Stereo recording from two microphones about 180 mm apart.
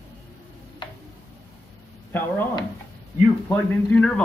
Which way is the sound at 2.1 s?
10° left (ahead or behind).